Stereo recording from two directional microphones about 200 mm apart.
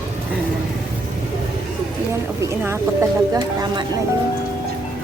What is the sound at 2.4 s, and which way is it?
Speech, 15° right (ahead or behind).